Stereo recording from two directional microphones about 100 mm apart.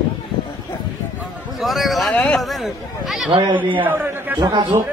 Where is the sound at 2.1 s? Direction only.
15° left (ahead or behind).